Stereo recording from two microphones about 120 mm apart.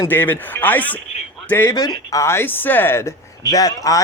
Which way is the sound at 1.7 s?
30° left (ahead or behind).